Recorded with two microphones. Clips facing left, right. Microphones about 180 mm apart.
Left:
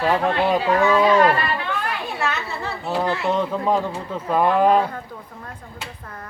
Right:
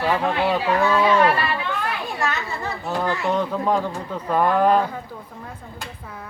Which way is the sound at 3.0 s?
5° left (ahead or behind).